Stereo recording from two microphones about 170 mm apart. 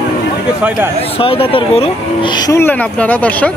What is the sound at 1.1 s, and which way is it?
Speech, 35° left (ahead or behind).